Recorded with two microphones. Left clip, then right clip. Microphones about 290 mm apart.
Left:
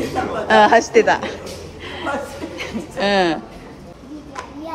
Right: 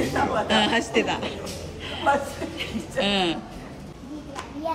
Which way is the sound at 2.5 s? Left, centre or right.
Centre.